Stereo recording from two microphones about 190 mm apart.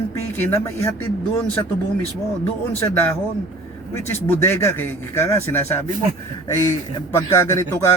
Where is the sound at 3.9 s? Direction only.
10° left (ahead or behind).